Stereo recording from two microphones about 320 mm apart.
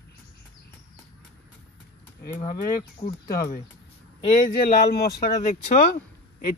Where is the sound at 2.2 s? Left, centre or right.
Left.